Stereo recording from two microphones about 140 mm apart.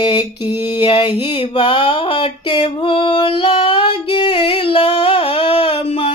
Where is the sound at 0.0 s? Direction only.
35° left (ahead or behind).